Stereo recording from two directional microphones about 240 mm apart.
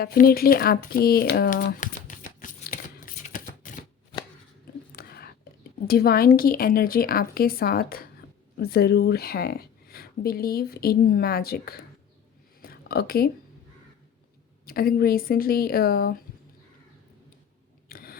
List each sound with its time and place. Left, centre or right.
0.0 s crumpling: left
4.9 s whispering: left
5.9 s speech: left
12.6 s a sound: left
14.6 s speech: left
17.8 s a sound: left